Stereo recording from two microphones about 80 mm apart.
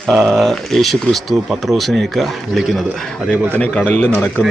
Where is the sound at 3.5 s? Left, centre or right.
Centre.